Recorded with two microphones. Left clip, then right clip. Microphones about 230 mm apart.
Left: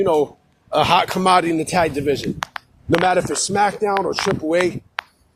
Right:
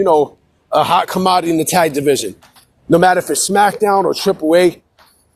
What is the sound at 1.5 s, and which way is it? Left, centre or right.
Speech, right.